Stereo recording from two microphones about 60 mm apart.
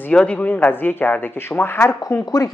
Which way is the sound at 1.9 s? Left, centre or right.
Left.